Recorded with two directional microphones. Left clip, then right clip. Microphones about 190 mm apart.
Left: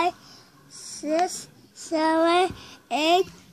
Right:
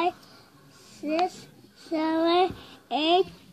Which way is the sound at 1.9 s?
25° left (ahead or behind).